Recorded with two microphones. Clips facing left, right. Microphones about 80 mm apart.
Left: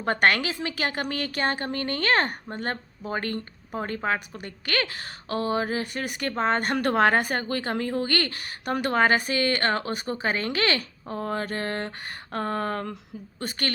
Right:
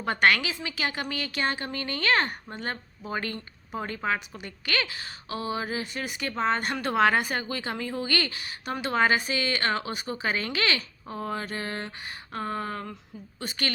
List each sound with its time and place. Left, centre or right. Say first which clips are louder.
0.0 s a woman's voice: left 1 dB; left